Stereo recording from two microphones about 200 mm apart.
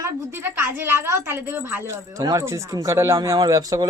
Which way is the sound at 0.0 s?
10° right (ahead or behind).